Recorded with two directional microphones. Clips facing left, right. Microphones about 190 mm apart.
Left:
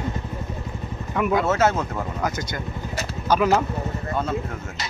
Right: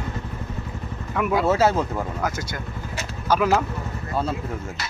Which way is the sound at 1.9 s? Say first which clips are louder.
Even; 5° right (ahead or behind).